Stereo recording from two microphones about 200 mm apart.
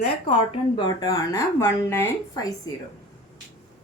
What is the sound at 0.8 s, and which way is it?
Speech, 20° left (ahead or behind).